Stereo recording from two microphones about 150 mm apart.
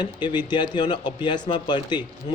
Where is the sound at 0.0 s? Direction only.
30° left (ahead or behind).